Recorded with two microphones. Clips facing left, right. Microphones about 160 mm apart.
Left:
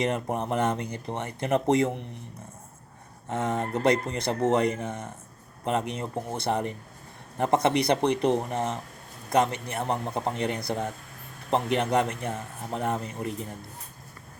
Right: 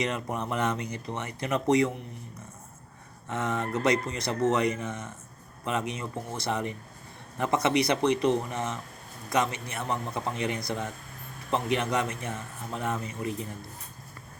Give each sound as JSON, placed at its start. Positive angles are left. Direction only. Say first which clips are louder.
{"t": 0.0, "sound": "speech", "louder": "left 3 dB", "side_deg": 50}
{"t": 3.2, "sound": "a man's voice", "louder": "left 2 dB", "side_deg": 50}